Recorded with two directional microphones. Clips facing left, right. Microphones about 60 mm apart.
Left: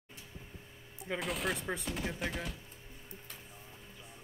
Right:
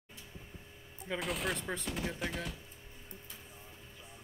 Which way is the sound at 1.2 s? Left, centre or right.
Centre.